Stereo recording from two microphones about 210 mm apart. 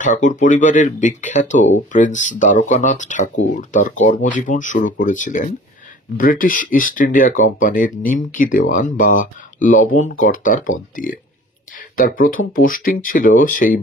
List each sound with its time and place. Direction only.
0.0 s speech: 40° left (ahead or behind)